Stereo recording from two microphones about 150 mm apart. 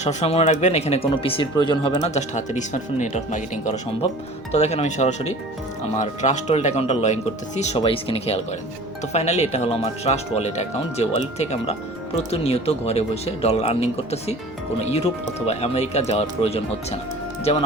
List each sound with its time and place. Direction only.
0.0 s speech: 50° left (ahead or behind)
7.8 s speech: 40° left (ahead or behind)